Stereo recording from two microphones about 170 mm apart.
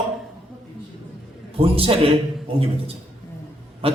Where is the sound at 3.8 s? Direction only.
35° right (ahead or behind).